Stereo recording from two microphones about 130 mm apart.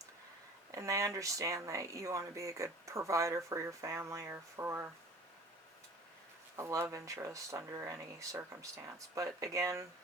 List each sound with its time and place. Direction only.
0.7 s speech: 25° right (ahead or behind)
6.6 s speech: 25° right (ahead or behind)